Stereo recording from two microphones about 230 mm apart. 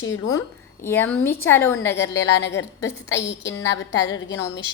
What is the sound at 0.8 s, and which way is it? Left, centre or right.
A woman's voice, centre.